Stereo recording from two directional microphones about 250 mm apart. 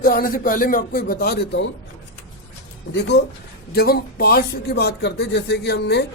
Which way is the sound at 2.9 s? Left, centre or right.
Left.